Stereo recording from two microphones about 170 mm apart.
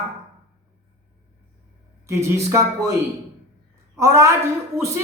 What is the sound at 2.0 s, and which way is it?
Speech, 15° right (ahead or behind).